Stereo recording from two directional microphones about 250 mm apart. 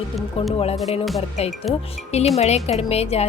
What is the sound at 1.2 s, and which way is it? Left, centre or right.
A woman's voice, left.